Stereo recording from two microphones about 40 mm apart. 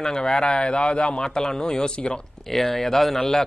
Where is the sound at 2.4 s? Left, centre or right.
Centre.